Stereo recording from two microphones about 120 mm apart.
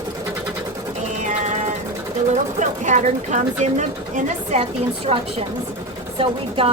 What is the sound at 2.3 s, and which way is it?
Speech, 85° right.